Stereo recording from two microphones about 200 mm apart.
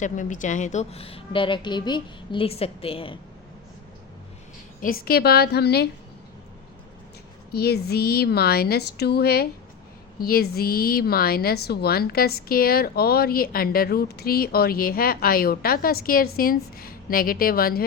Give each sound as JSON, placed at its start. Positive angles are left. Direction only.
{"t": 0.0, "sound": "a woman's voice", "side_deg": 40}
{"t": 4.8, "sound": "a woman's voice", "side_deg": 45}
{"t": 7.5, "sound": "a woman's voice", "side_deg": 50}